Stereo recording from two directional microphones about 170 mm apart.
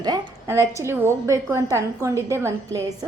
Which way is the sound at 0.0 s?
20° right (ahead or behind).